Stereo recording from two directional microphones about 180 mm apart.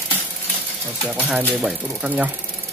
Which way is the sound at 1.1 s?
10° right (ahead or behind).